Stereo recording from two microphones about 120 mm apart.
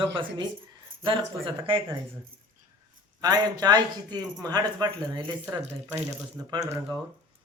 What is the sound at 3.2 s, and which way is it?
Speech, 35° right (ahead or behind).